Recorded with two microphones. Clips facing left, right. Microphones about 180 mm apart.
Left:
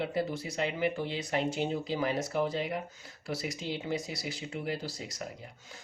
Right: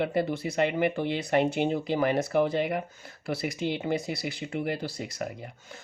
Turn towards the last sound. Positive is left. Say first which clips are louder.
# right 4 dB
turn(degrees=-60)  # may be behind; listen again after turning